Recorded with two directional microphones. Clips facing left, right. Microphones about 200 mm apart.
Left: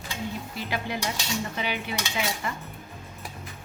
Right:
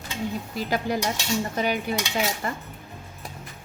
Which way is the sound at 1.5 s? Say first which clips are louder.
Right 6 dB; 45° right (ahead or behind).